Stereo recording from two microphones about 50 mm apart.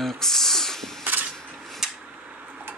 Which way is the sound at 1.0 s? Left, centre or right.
Right.